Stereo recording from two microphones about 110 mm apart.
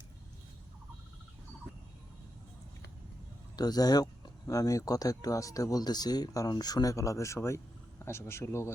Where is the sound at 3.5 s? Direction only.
35° left (ahead or behind).